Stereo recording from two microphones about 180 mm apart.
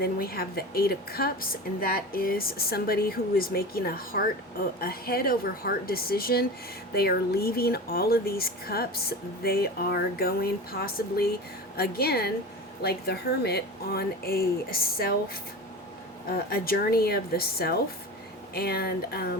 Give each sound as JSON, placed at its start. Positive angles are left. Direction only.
{"t": 0.0, "sound": "speech", "side_deg": 55}
{"t": 16.5, "sound": "speech", "side_deg": 55}